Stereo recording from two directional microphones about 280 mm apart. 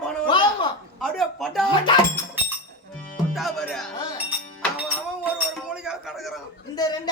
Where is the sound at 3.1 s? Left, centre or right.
Centre.